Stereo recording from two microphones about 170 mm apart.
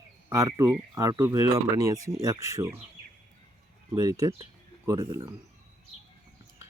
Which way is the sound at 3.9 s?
20° right (ahead or behind).